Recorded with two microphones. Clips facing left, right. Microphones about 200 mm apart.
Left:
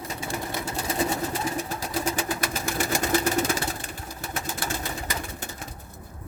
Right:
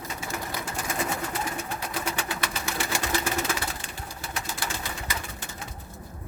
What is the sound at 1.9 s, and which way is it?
Sewing machine, 40° left (ahead or behind).